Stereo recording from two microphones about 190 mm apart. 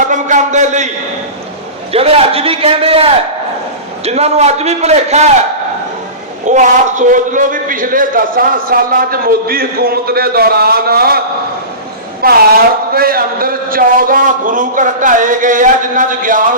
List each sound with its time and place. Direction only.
0.0 s a sound: 40° right (ahead or behind)
1.9 s a man's voice: 30° right (ahead or behind)
6.4 s a man's voice: 40° right (ahead or behind)
12.2 s a man's voice: 50° right (ahead or behind)